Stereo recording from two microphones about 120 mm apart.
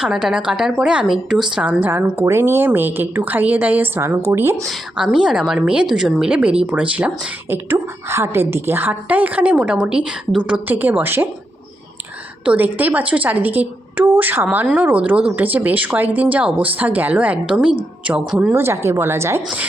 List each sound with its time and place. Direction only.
0.0 s a woman's voice: centre (ahead or behind); by 4.6 s 20° right (ahead or behind)
4.6 s a woman's voice: 5° right (ahead or behind)
12.5 s a woman's voice: 15° right (ahead or behind)